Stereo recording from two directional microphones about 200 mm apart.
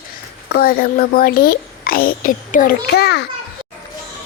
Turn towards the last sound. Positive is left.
turn(degrees=50)  # may be behind; listen again after turning